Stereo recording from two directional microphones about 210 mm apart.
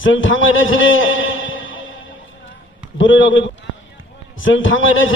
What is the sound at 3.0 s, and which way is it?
A man's voice, 65° left (ahead or behind).